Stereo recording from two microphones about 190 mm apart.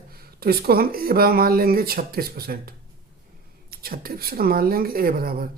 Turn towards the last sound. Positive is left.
turn(degrees=-50)  # may be behind; listen again after turning